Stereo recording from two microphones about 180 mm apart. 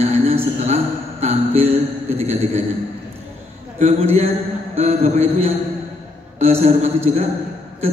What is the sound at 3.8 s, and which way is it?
Mantra, 35° right (ahead or behind).